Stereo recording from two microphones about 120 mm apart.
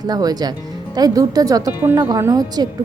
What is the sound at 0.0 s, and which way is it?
Speech, 35° right (ahead or behind).